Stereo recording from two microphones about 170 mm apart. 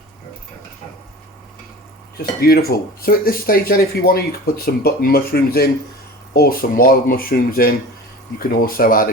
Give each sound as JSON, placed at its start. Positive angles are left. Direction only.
{"t": 2.1, "sound": "speech", "side_deg": 65}